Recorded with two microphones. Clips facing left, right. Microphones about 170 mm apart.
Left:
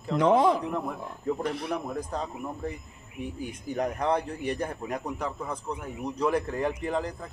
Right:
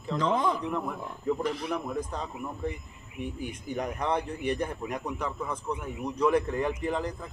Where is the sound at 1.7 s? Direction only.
35° left (ahead or behind).